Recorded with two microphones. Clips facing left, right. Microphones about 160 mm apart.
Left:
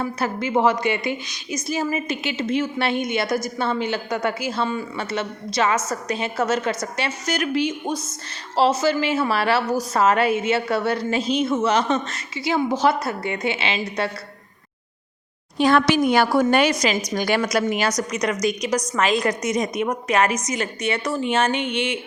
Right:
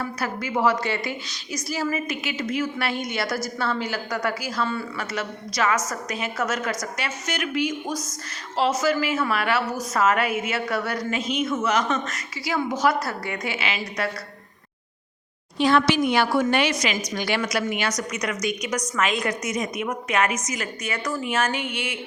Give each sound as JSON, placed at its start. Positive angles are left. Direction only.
{"t": 0.0, "sound": "a woman's voice", "side_deg": 25}
{"t": 15.5, "sound": "a woman's voice", "side_deg": 50}